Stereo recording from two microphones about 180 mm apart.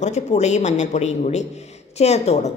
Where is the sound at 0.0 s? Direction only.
40° left (ahead or behind).